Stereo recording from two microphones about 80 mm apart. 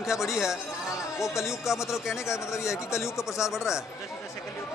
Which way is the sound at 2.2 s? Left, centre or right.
Left.